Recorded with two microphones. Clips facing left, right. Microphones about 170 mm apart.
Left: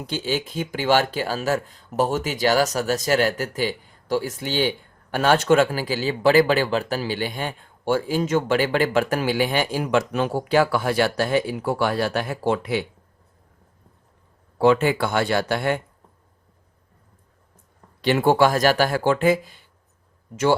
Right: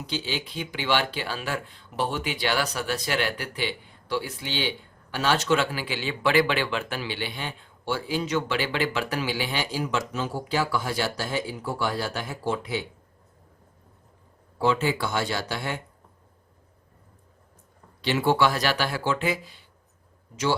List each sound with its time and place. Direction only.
0.0 s speech: 50° left (ahead or behind); by 12.8 s 65° left (ahead or behind)
14.6 s speech: 60° left (ahead or behind)
18.0 s speech: 50° left (ahead or behind)